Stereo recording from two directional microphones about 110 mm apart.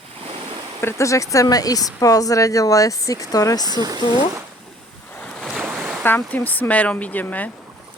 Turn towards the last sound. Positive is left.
turn(degrees=15)  # may be behind; listen again after turning